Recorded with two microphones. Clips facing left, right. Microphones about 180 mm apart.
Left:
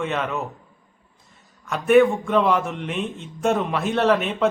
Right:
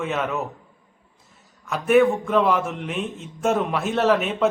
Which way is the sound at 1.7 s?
Centre (ahead or behind).